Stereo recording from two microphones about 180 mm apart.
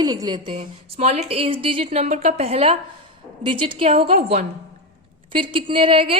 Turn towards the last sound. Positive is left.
turn(degrees=-30)  # may be behind; listen again after turning